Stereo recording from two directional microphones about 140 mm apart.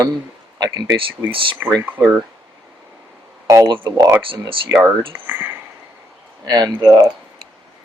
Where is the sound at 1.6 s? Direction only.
10° right (ahead or behind).